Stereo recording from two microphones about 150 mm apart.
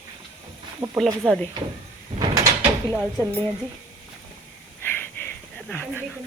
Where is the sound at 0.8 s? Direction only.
40° right (ahead or behind).